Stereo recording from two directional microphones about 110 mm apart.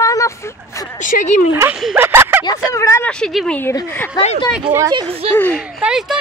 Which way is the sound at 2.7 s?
30° left (ahead or behind).